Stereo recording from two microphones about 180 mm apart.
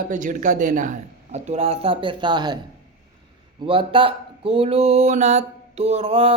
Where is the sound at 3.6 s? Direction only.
30° right (ahead or behind).